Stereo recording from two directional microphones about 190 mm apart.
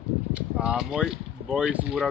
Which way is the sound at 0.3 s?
5° right (ahead or behind).